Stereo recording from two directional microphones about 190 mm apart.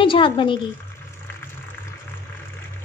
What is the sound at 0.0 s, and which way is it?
Speech, 25° left (ahead or behind).